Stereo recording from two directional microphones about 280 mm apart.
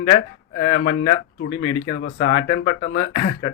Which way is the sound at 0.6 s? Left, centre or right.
Left.